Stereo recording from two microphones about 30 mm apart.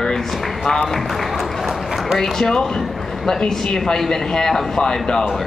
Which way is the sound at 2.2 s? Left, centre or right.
Centre.